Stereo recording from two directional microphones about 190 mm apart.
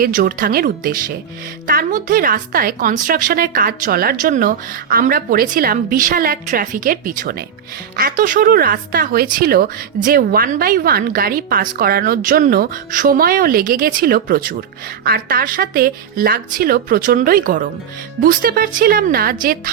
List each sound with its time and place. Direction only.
0.0 s speech: 50° right (ahead or behind)